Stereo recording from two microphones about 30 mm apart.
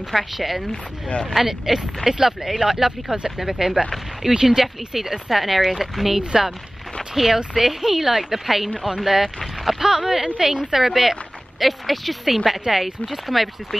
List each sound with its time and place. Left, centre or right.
0.1 s speech: centre
1.0 s speech: left
1.4 s speech: centre
5.3 s speech: centre
10.4 s a woman's voice: right
10.7 s speech: centre